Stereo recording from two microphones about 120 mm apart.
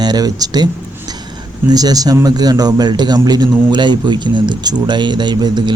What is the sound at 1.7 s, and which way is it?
Speech, 35° right (ahead or behind).